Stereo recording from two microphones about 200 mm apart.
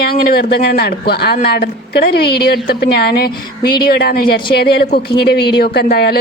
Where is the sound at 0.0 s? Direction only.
50° left (ahead or behind).